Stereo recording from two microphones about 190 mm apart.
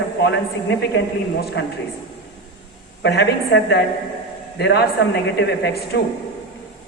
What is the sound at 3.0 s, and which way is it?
A man's voice, 65° left (ahead or behind).